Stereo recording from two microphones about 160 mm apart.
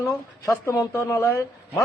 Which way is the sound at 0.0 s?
20° left (ahead or behind).